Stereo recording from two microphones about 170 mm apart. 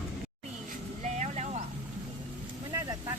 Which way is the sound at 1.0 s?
45° right (ahead or behind).